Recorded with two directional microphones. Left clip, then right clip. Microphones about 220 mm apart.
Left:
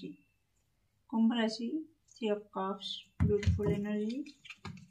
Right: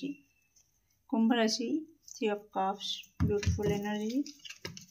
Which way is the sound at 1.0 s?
40° right (ahead or behind).